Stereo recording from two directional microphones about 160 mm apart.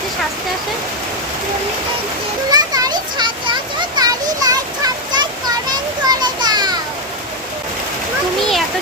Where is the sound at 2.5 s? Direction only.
25° right (ahead or behind).